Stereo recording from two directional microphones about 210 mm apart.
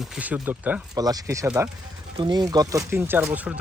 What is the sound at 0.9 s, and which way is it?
Speech, 20° right (ahead or behind).